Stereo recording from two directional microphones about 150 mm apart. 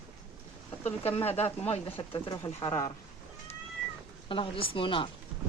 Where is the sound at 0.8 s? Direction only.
45° left (ahead or behind).